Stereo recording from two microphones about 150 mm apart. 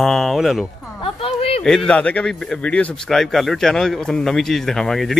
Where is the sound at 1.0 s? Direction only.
40° left (ahead or behind).